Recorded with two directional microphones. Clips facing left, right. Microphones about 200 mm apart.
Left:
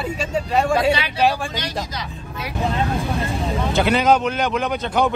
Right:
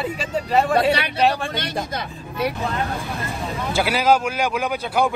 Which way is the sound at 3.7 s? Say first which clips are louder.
Left 1 dB; 5° right (ahead or behind).